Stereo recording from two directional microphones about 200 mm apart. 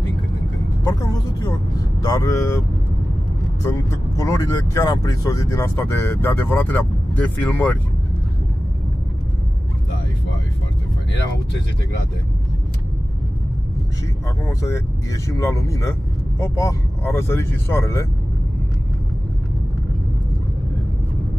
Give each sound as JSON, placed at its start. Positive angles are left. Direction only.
{"t": 0.8, "sound": "speech", "side_deg": 20}
{"t": 3.6, "sound": "speech", "side_deg": 15}
{"t": 14.4, "sound": "speech", "side_deg": 15}